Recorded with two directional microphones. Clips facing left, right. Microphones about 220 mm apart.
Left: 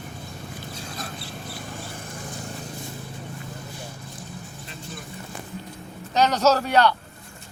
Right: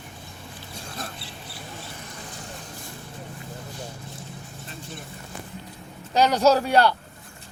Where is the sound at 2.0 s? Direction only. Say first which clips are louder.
Left 3 dB; 50° left (ahead or behind).